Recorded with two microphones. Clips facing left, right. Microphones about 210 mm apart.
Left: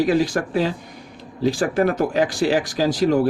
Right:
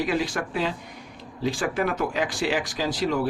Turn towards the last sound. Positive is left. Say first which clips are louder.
# left 7 dB
turn(degrees=40)  # may be behind; listen again after turning